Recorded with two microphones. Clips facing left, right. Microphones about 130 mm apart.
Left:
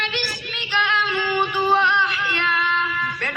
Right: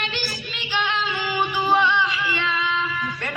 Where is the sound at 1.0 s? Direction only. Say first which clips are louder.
Left 2 dB; centre (ahead or behind).